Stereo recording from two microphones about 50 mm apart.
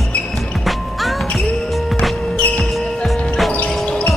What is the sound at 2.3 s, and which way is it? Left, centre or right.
Music, left.